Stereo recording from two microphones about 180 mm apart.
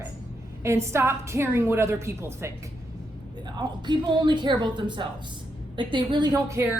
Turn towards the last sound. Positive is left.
turn(degrees=-20)  # may be behind; listen again after turning